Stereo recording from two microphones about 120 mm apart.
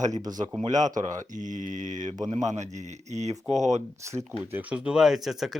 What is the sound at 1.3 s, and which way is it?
Mantra, 90° right.